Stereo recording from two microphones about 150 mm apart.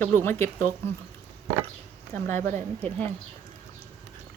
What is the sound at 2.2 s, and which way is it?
Speech, 15° left (ahead or behind).